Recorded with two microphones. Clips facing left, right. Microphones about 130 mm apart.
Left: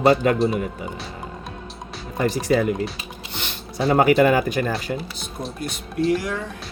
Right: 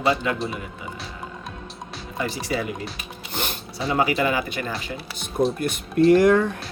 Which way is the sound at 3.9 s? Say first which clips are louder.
Left 6 dB; 50° left (ahead or behind).